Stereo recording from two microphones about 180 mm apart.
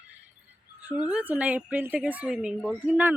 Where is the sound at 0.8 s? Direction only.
10° right (ahead or behind).